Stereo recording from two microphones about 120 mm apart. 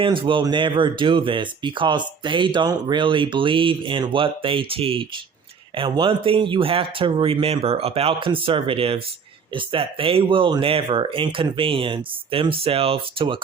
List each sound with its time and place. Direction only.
0.0 s speech: 45° right (ahead or behind)